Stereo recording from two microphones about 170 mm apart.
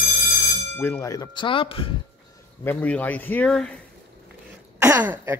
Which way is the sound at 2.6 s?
10° left (ahead or behind).